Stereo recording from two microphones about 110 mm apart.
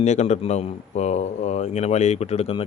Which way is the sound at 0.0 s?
90° left.